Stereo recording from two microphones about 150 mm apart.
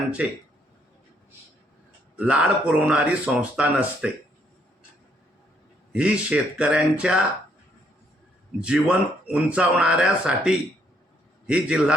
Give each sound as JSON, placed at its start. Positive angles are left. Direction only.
{"t": 0.2, "sound": "speech", "side_deg": -10}
{"t": 2.1, "sound": "speech", "side_deg": -10}
{"t": 5.9, "sound": "speech", "side_deg": -5}
{"t": 8.6, "sound": "speech", "side_deg": -5}